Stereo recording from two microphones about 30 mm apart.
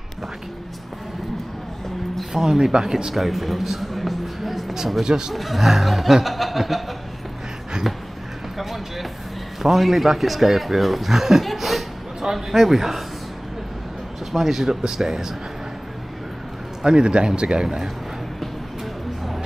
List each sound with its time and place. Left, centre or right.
2.3 s speech: centre
3.2 s a sound: centre
5.0 s speech: right
5.3 s a man's voice: centre
7.8 s a man's voice: centre
11.4 s a sound: centre
12.3 s speech: centre
14.3 s speech: centre
16.8 s speech: right